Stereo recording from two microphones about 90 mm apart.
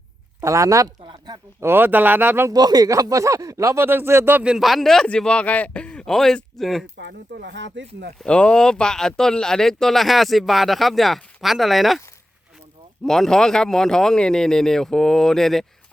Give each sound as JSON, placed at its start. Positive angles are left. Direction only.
{"t": 0.4, "sound": "speech", "side_deg": -35}
{"t": 1.6, "sound": "speech", "side_deg": -25}
{"t": 2.5, "sound": "speech", "side_deg": -45}
{"t": 4.4, "sound": "a man's voice", "side_deg": -5}
{"t": 8.2, "sound": "speech", "side_deg": 10}
{"t": 13.1, "sound": "speech", "side_deg": 5}